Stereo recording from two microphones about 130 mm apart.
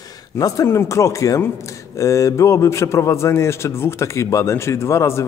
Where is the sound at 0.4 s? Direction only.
25° left (ahead or behind).